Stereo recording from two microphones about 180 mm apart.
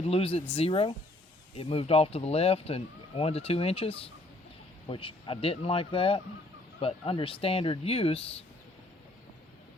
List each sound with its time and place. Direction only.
0.0 s speech: 35° left (ahead or behind)